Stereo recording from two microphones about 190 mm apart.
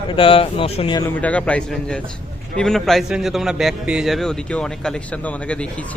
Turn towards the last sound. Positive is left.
turn(degrees=5)  # may be behind; listen again after turning